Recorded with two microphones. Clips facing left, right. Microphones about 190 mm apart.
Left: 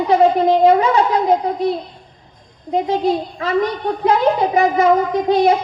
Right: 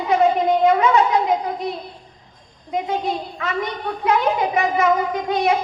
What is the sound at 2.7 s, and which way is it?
A woman's voice, 35° left (ahead or behind).